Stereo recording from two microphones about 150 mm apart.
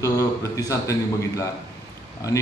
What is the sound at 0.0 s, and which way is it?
Speech, 20° left (ahead or behind).